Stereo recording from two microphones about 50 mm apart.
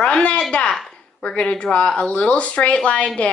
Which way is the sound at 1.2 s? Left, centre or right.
Left.